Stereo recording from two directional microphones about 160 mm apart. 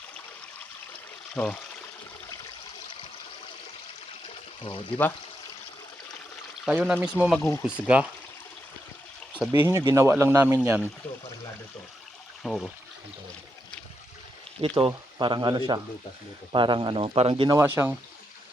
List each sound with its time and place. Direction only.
1.4 s speech: 10° left (ahead or behind)
6.7 s speech: 5° right (ahead or behind)
7.3 s speech: 15° left (ahead or behind)
7.9 s speech: 10° right (ahead or behind)
9.5 s speech: 20° right (ahead or behind)
12.4 s speech: 5° left (ahead or behind)
14.6 s speech: 35° right (ahead or behind)
17.6 s speech: 15° right (ahead or behind)